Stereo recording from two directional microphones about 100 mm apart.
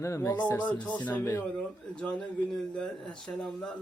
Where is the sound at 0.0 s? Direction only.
30° left (ahead or behind).